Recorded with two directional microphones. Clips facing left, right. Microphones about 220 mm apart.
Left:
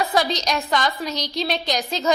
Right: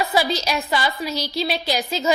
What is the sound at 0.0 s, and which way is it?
A woman's voice, 5° right (ahead or behind).